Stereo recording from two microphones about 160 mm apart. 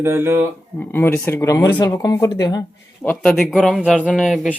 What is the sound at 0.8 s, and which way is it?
Speech, 10° left (ahead or behind).